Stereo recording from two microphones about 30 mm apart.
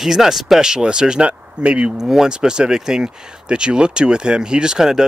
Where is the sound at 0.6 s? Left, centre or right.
Right.